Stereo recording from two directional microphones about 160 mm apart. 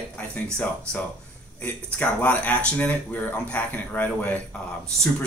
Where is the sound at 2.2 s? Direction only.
10° left (ahead or behind).